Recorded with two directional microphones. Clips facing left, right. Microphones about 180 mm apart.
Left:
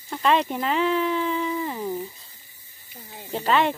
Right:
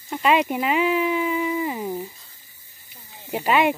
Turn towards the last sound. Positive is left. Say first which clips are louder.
# right 2 dB
turn(degrees=-10)  # may be behind; listen again after turning